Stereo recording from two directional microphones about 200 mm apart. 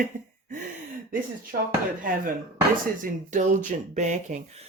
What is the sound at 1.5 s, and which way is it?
Speech, 45° right (ahead or behind).